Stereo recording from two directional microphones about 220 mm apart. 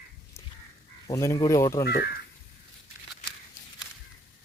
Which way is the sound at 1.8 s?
45° left (ahead or behind).